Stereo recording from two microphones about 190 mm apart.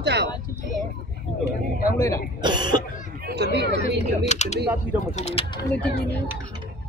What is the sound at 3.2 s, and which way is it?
Speech, 60° right (ahead or behind).